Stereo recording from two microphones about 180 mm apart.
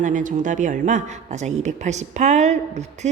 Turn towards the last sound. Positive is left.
turn(degrees=-40)  # may be behind; listen again after turning